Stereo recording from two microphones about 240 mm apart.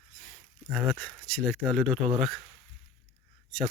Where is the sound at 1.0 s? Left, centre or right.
Centre.